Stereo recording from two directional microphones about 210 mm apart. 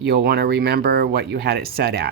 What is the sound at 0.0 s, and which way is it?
Speech, 50° right (ahead or behind).